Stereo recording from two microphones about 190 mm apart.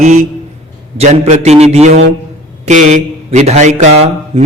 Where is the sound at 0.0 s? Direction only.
35° right (ahead or behind).